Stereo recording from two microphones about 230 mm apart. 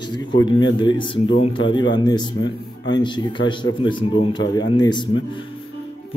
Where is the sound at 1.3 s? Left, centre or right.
Left.